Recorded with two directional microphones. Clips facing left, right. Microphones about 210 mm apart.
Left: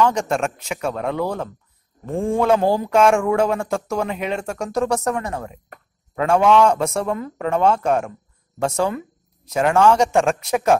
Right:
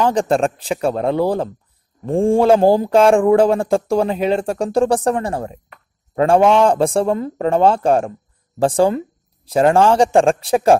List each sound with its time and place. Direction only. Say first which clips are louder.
0.0 s speech: right 3 dB; 30° right (ahead or behind)